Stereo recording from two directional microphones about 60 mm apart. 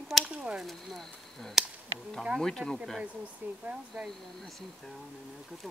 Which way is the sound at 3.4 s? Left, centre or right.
Right.